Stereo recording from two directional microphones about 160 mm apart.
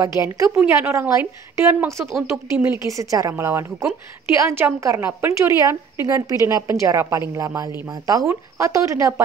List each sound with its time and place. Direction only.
0.0 s a woman's voice: 20° right (ahead or behind)